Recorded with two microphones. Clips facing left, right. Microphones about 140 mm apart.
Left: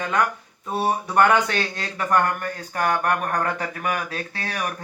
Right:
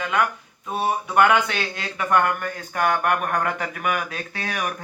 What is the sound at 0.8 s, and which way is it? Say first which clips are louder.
A man's voice: even; 35° left (ahead or behind).